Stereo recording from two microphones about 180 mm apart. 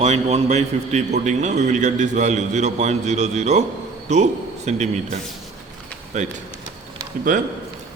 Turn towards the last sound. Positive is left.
turn(degrees=-45)  # may be behind; listen again after turning